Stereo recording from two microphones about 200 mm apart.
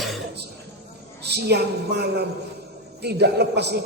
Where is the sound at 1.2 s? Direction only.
55° right (ahead or behind).